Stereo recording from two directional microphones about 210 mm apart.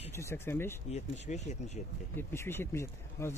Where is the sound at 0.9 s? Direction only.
30° left (ahead or behind).